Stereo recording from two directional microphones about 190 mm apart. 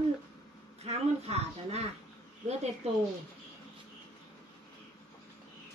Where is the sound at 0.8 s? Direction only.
35° right (ahead or behind).